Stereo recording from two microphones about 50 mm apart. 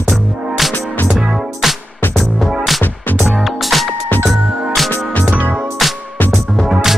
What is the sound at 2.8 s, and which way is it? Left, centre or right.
Music, left.